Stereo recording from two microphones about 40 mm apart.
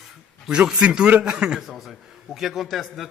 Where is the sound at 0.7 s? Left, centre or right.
Right.